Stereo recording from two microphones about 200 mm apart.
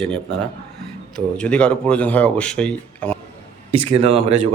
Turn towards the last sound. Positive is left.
turn(degrees=-30)  # may be behind; listen again after turning